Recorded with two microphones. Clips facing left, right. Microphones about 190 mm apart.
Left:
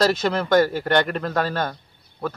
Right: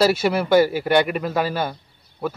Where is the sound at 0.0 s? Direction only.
10° right (ahead or behind).